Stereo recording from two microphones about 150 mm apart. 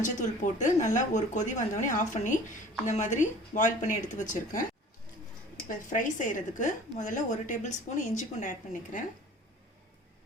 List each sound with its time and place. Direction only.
0.0 s speech: 55° left (ahead or behind)
5.6 s speech: 60° left (ahead or behind)